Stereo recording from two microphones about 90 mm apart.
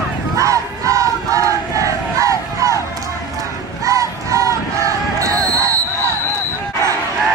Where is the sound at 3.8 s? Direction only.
35° right (ahead or behind).